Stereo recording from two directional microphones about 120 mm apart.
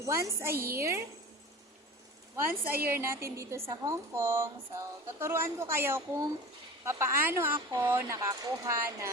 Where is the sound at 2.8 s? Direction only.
20° right (ahead or behind).